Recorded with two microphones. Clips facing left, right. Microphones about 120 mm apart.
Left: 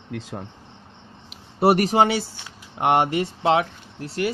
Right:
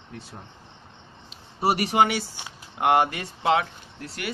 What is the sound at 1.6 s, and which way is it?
Speech, 50° left (ahead or behind).